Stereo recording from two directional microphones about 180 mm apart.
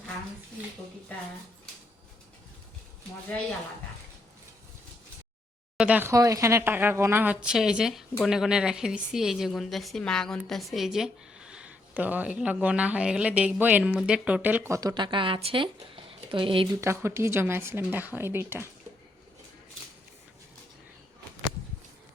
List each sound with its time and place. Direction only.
5.7 s a woman's voice: 5° right (ahead or behind); by 16.6 s 30° right (ahead or behind)
16.8 s speech: 15° right (ahead or behind)